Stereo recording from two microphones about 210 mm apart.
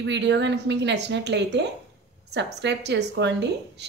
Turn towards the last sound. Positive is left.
turn(degrees=-55)  # may be behind; listen again after turning